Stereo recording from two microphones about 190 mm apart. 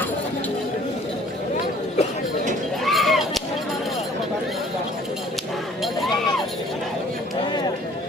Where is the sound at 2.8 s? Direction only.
Centre (ahead or behind).